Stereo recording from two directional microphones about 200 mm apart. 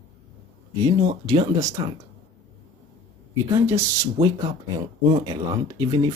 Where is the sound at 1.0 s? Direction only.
25° right (ahead or behind).